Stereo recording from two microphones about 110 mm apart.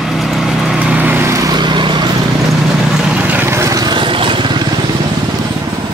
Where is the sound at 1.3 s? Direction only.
35° right (ahead or behind).